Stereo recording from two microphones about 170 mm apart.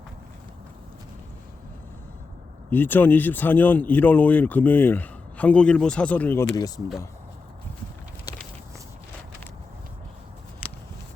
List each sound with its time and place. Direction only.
2.6 s speech: 10° left (ahead or behind)
6.6 s speech: 20° left (ahead or behind)